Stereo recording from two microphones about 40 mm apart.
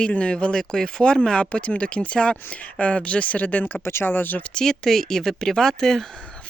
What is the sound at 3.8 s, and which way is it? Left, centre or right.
Speech, left.